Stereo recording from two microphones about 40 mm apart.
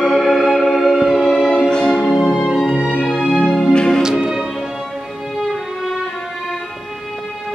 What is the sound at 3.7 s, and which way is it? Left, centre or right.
Music, centre.